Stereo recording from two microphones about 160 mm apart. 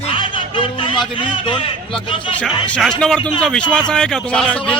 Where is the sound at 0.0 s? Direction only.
30° left (ahead or behind).